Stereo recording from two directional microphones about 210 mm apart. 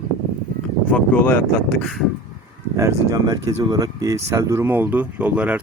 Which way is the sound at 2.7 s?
15° right (ahead or behind).